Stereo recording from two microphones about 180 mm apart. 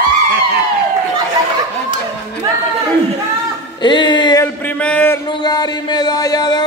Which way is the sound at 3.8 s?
25° left (ahead or behind).